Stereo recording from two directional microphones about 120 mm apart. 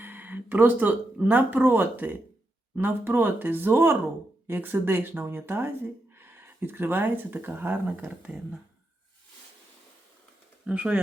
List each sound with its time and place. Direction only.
0.0 s speech: 15° right (ahead or behind)
10.7 s speech: 10° right (ahead or behind)